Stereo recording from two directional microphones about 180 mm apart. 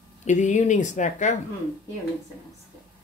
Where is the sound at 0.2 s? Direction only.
40° left (ahead or behind).